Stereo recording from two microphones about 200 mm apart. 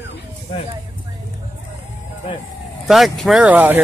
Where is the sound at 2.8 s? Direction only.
Centre (ahead or behind).